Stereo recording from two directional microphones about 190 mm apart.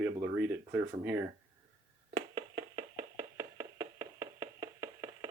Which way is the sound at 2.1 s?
25° right (ahead or behind).